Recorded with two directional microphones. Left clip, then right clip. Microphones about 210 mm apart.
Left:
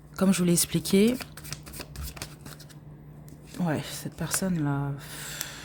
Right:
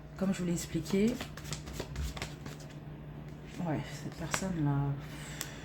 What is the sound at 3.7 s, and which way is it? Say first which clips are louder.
Speech: left 6 dB; 50° left (ahead or behind).